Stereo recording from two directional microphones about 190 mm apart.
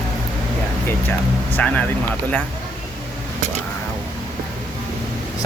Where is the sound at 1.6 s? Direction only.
10° left (ahead or behind).